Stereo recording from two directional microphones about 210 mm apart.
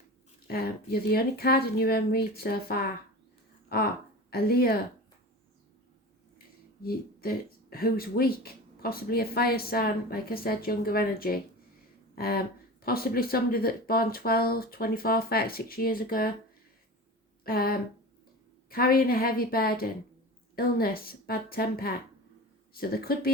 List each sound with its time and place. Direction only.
0.4 s speech: 50° left (ahead or behind)
4.3 s speech: 45° left (ahead or behind)
6.8 s speech: 45° left (ahead or behind)
17.4 s speech: 45° left (ahead or behind)